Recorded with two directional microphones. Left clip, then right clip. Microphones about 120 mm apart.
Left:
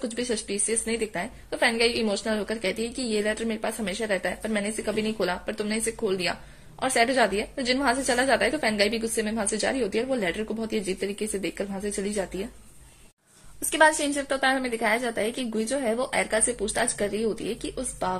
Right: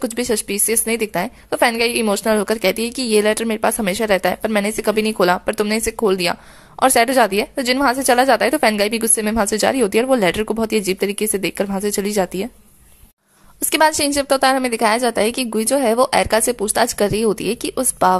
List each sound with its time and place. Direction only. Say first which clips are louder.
0.0 s a woman's voice: right 9 dB; 40° right (ahead or behind)
13.7 s a woman's voice: right 5 dB; 45° right (ahead or behind)